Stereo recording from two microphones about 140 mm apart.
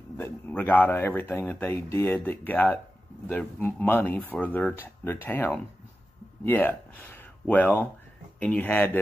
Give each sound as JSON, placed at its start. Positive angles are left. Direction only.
{"t": 0.2, "sound": "speech", "side_deg": 10}